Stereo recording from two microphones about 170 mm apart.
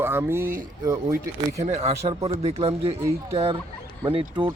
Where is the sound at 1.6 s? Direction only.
40° right (ahead or behind).